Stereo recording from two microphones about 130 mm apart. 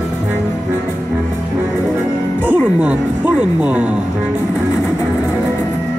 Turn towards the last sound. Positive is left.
turn(degrees=-10)  # may be behind; listen again after turning